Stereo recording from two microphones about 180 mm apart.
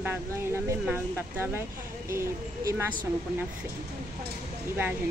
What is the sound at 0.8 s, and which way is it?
A woman's voice, 10° right (ahead or behind).